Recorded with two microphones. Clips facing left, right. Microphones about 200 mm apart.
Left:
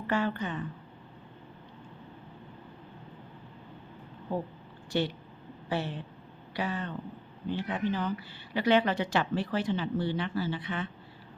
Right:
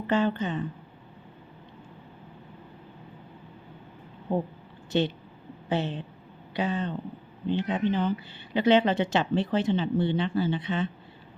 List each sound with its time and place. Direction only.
0.1 s speech: 20° right (ahead or behind)
4.9 s speech: 20° right (ahead or behind)